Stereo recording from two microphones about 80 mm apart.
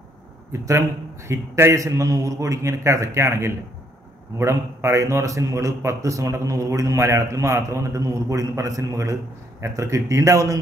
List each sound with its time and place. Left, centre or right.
0.5 s a man's voice: right